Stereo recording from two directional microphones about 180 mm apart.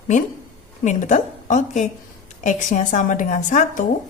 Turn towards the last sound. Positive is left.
turn(degrees=45)  # may be behind; listen again after turning